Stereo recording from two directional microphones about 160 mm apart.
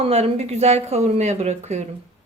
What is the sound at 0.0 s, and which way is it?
Speech, 40° right (ahead or behind).